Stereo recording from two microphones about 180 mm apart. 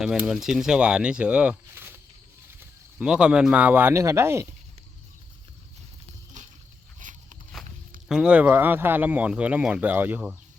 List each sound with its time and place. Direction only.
0.0 s speech: 5° right (ahead or behind)
6.4 s a sound: 45° right (ahead or behind)
7.0 s walk: 45° right (ahead or behind)
8.0 s speech: 5° right (ahead or behind)